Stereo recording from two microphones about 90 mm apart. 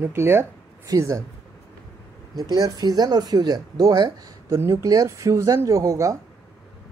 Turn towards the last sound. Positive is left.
turn(degrees=-35)  # may be behind; listen again after turning